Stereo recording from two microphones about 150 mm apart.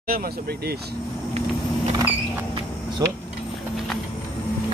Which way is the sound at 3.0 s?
25° right (ahead or behind).